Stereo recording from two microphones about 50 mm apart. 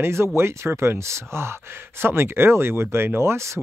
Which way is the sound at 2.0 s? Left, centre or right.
Right.